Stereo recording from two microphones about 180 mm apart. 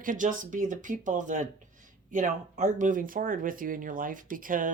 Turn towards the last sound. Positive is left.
turn(degrees=-50)  # may be behind; listen again after turning